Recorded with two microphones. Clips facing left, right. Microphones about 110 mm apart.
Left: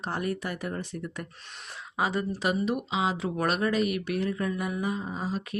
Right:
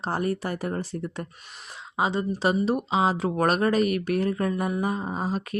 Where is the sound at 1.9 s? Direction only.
25° right (ahead or behind).